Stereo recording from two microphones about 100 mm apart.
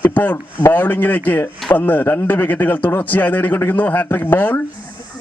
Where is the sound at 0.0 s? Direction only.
20° left (ahead or behind).